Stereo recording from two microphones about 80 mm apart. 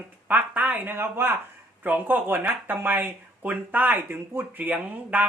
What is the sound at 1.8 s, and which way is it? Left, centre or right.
Speech, right.